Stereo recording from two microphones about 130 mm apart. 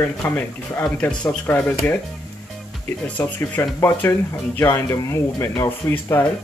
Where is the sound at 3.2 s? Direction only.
20° left (ahead or behind).